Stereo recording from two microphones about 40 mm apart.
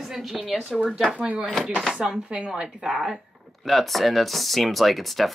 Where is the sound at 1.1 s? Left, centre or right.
Right.